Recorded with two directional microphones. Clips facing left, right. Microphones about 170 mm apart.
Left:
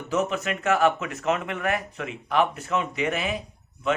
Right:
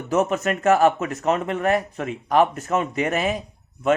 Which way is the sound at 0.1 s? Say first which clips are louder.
Right 5 dB; 45° right (ahead or behind).